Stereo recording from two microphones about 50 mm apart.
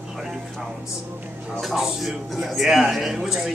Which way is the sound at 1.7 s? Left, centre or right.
Centre.